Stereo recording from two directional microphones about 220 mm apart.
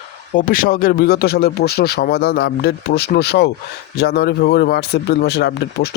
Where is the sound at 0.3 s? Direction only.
40° left (ahead or behind).